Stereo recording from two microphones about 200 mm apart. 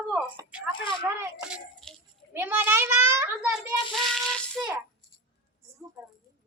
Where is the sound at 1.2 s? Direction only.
5° right (ahead or behind).